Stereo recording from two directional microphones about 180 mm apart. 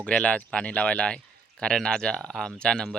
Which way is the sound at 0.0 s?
5° left (ahead or behind).